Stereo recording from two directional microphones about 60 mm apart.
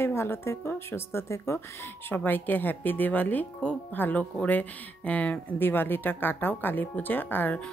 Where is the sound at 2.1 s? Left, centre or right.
Left.